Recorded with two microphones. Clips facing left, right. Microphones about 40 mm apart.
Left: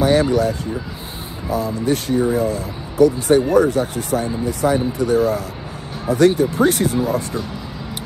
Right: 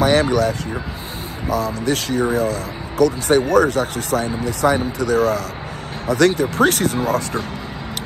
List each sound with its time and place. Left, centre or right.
0.0 s speech: right